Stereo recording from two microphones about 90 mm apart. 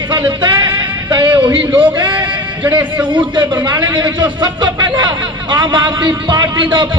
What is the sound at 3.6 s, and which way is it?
Speech, 55° right (ahead or behind).